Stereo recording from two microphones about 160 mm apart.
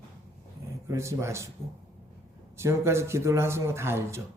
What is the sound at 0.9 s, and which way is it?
Speech, 15° right (ahead or behind).